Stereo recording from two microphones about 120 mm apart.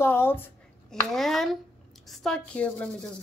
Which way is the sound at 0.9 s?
Centre (ahead or behind).